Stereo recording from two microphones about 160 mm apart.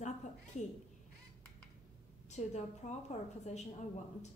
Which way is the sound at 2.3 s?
45° left (ahead or behind).